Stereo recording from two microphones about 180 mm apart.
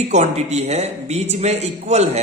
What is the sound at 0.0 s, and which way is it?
A man's voice, 35° right (ahead or behind).